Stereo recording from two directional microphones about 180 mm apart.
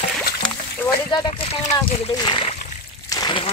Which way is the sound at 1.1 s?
25° left (ahead or behind).